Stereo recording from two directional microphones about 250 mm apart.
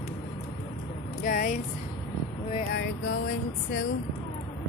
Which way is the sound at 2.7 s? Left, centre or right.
Left.